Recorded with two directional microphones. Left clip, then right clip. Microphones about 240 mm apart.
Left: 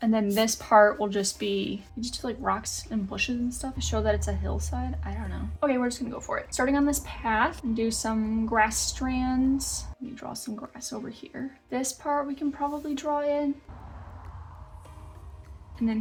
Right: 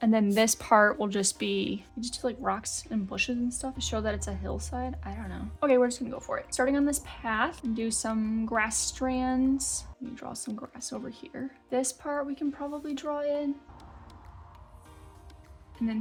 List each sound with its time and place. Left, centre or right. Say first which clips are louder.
0.0 s speech: even; right